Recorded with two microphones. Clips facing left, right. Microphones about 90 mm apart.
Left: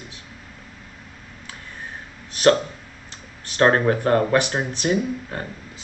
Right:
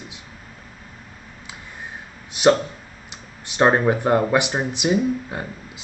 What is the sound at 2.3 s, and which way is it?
Speech, 15° right (ahead or behind).